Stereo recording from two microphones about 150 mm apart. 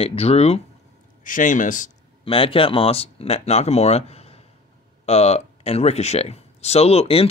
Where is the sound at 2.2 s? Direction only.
40° left (ahead or behind).